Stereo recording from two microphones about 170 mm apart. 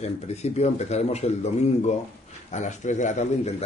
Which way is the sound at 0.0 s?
40° left (ahead or behind).